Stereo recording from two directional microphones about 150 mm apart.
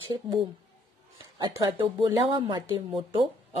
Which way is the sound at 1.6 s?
30° right (ahead or behind).